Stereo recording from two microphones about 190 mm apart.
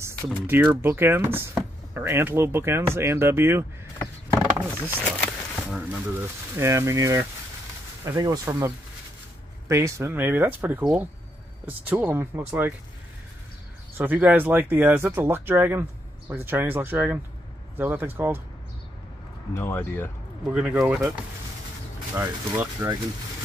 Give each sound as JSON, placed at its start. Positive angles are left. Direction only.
{"t": 0.0, "sound": "speech", "side_deg": -10}
{"t": 5.2, "sound": "a sound", "side_deg": 0}
{"t": 6.6, "sound": "speech", "side_deg": -15}
{"t": 13.9, "sound": "speech", "side_deg": -10}
{"t": 19.5, "sound": "speech", "side_deg": 10}
{"t": 20.4, "sound": "speech", "side_deg": -5}
{"t": 22.1, "sound": "speech", "side_deg": -15}